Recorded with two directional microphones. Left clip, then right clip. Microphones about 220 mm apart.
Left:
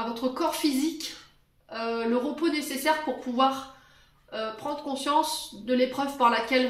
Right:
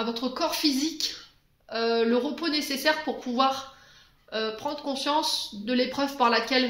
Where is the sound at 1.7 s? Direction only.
45° right (ahead or behind).